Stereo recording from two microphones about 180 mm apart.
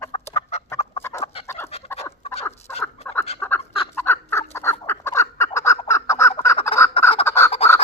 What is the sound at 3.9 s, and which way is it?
Fowl, 10° left (ahead or behind).